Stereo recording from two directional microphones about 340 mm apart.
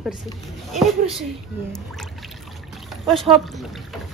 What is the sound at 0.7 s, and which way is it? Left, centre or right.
Speech, centre.